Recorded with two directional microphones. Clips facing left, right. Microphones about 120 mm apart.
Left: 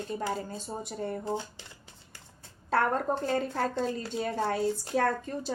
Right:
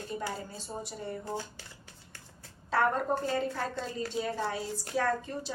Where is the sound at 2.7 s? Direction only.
50° left (ahead or behind).